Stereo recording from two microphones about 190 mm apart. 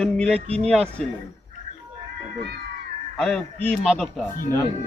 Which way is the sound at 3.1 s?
5° left (ahead or behind).